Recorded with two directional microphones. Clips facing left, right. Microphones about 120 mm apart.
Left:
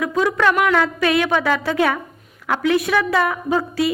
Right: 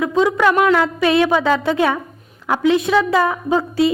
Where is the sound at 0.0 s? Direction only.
20° right (ahead or behind).